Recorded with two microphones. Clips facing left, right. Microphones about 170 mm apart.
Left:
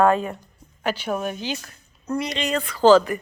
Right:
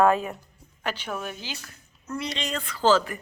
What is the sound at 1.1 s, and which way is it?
Speech, 20° left (ahead or behind).